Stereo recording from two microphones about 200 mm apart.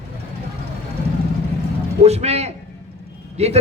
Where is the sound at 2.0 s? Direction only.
30° right (ahead or behind).